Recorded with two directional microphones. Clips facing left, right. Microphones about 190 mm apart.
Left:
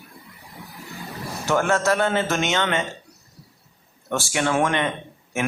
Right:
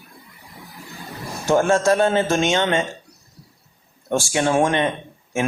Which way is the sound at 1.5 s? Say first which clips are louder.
Right 4 dB; 30° right (ahead or behind).